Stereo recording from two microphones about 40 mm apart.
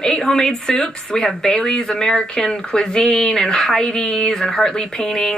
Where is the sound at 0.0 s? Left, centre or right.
Centre.